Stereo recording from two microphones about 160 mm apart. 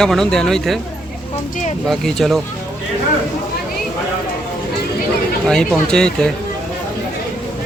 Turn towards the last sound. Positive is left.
turn(degrees=5)  # may be behind; listen again after turning